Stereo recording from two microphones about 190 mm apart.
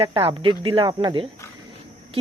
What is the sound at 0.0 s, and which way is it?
Speech, 30° right (ahead or behind).